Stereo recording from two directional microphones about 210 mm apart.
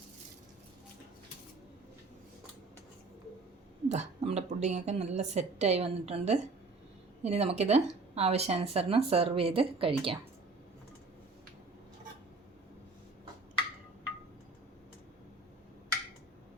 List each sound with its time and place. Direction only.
3.8 s a woman's voice: 30° right (ahead or behind)